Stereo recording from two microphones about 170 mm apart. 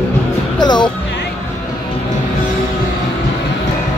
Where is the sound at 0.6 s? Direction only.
25° left (ahead or behind).